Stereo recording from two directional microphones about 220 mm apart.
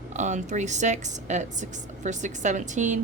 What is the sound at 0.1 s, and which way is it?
A woman's voice, 35° right (ahead or behind).